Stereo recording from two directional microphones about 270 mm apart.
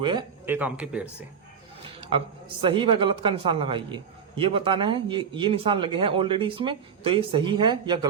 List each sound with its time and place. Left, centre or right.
0.0 s speech: centre
2.0 s speech: centre